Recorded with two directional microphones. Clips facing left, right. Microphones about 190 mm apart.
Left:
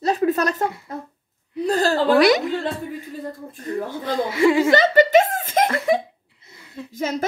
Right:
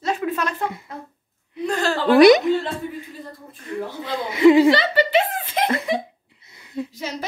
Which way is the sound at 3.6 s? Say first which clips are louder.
Left 2 dB; 40° left (ahead or behind).